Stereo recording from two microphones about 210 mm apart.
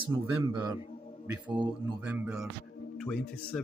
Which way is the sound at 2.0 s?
5° right (ahead or behind).